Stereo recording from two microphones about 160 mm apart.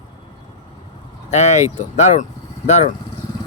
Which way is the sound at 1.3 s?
45° left (ahead or behind).